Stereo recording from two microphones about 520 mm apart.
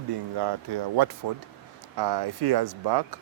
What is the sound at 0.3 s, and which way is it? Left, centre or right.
Speech, right.